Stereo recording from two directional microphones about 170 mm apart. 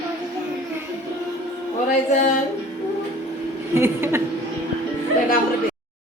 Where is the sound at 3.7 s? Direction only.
15° right (ahead or behind).